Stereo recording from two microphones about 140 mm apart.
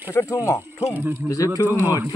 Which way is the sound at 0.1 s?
20° left (ahead or behind).